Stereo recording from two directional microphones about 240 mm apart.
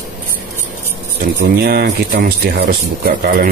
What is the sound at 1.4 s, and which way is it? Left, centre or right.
Speech, right.